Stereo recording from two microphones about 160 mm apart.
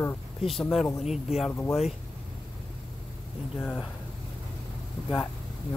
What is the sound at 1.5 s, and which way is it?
Speech, 10° left (ahead or behind).